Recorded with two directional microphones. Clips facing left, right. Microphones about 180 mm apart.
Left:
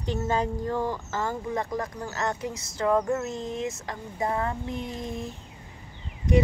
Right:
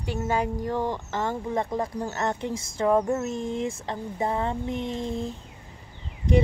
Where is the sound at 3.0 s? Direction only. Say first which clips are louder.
Right 2 dB; 20° right (ahead or behind).